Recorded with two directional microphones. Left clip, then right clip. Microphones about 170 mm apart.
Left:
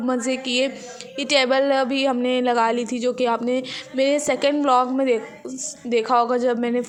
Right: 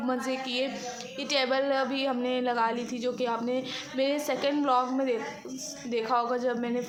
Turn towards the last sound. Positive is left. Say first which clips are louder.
# left 8 dB
turn(degrees=45)  # may be behind; listen again after turning